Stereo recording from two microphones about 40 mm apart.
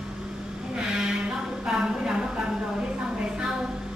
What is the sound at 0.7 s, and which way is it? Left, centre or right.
Sheep, centre.